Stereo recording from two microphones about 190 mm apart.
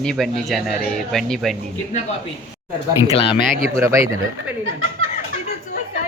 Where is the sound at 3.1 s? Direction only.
30° left (ahead or behind).